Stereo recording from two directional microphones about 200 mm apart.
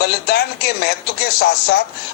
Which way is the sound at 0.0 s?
55° left (ahead or behind).